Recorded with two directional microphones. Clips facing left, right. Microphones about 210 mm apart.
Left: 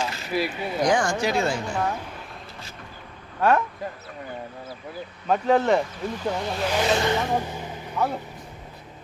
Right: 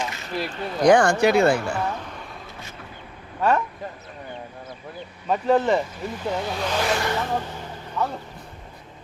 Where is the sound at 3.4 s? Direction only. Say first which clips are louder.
Left 1 dB; centre (ahead or behind).